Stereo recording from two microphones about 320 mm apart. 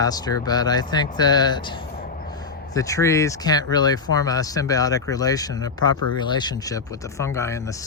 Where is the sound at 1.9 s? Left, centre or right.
Left.